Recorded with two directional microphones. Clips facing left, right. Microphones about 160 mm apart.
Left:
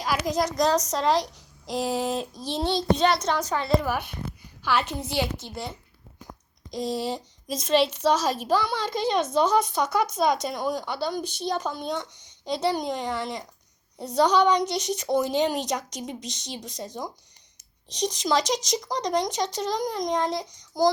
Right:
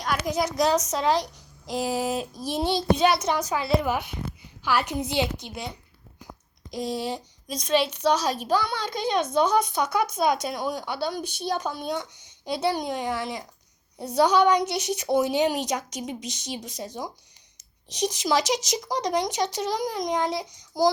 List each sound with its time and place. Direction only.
0.0 s a woman's voice: centre (ahead or behind)
3.8 s a woman's voice: 15° right (ahead or behind)
6.7 s a woman's voice: centre (ahead or behind)